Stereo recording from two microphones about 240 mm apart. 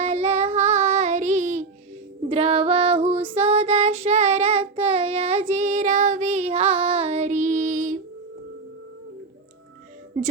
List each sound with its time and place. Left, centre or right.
0.0 s female singing: right
2.3 s child singing: right